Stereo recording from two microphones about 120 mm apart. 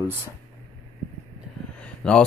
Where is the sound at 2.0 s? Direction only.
5° left (ahead or behind).